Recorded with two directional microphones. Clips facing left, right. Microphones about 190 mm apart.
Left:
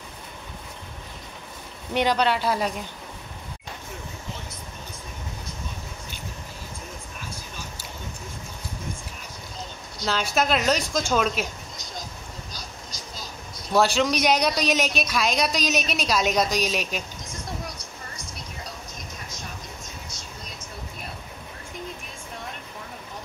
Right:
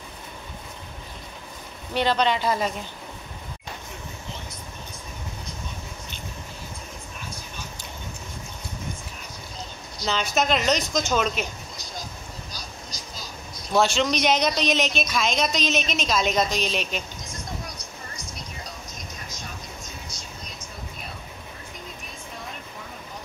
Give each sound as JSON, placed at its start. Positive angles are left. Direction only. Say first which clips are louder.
{"t": 2.0, "sound": "speech", "louder": "even", "side_deg": 10}
{"t": 10.3, "sound": "speech", "louder": "even", "side_deg": 5}
{"t": 13.7, "sound": "speech", "louder": "left 1 dB", "side_deg": 5}